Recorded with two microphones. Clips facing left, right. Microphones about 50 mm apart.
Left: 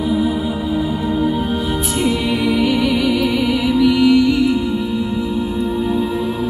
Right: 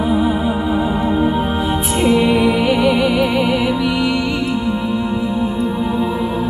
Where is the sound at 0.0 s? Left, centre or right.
Right.